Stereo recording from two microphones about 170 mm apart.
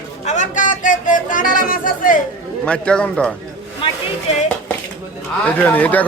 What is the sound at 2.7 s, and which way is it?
Speech, 5° left (ahead or behind).